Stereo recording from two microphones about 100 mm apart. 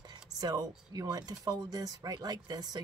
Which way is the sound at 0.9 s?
40° right (ahead or behind).